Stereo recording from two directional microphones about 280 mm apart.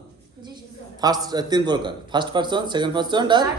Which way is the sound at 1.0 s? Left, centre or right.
Centre.